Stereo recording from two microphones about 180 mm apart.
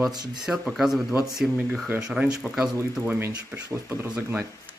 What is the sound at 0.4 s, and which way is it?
Speech, centre (ahead or behind).